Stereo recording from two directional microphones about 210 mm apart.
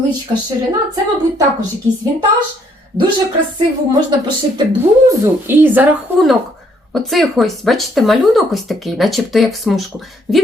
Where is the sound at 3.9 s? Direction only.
20° right (ahead or behind).